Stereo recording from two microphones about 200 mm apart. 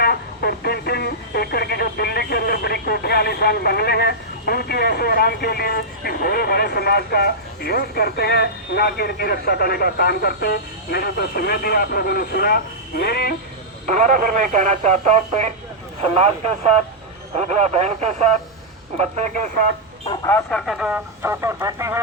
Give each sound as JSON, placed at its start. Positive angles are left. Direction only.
{"t": 0.0, "sound": "speech", "side_deg": 55}
{"t": 13.9, "sound": "speech", "side_deg": -40}
{"t": 17.3, "sound": "speech", "side_deg": -35}
{"t": 20.1, "sound": "speech", "side_deg": 15}
{"t": 20.5, "sound": "speech", "side_deg": 0}